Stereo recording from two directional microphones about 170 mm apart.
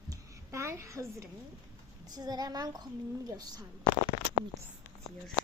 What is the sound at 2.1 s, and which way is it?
A child's voice, 25° right (ahead or behind).